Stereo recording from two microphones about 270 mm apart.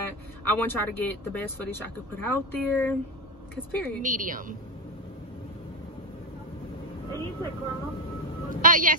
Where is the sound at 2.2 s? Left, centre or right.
Centre.